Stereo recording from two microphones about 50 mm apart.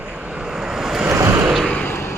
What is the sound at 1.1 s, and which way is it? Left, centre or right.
Vehicle, right.